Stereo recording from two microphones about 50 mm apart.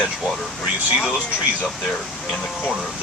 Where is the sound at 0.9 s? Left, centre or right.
Centre.